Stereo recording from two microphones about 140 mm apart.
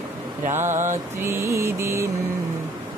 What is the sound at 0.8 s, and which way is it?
Mantra, 20° right (ahead or behind).